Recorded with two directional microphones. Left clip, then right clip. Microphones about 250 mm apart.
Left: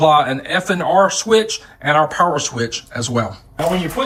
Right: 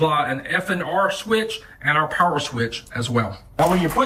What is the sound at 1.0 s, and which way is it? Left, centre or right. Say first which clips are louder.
Speech: left 6 dB; centre.